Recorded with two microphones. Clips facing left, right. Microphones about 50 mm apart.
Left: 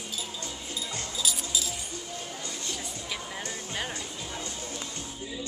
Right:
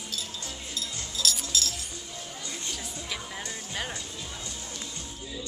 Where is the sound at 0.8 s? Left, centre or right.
Centre.